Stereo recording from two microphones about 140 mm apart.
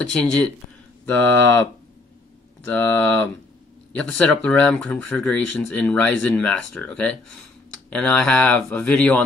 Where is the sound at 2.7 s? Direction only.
10° left (ahead or behind).